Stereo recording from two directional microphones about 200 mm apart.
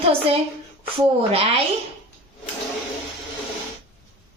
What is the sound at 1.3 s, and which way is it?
Speech, 30° right (ahead or behind).